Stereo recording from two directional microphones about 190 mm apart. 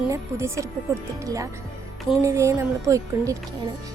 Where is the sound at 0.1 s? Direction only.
15° right (ahead or behind).